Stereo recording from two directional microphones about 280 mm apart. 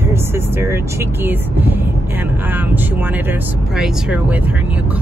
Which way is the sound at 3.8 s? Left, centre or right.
Centre.